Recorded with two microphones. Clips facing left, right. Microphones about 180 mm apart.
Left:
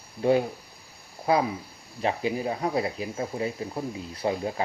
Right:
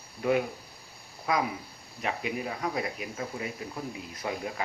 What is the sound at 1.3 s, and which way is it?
Speech, 30° left (ahead or behind).